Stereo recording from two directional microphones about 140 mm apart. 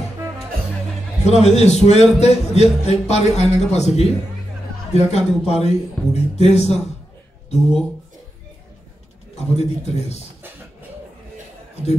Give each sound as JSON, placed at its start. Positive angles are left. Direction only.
{"t": 1.2, "sound": "a man's voice", "side_deg": 50}
{"t": 9.4, "sound": "a man's voice", "side_deg": 50}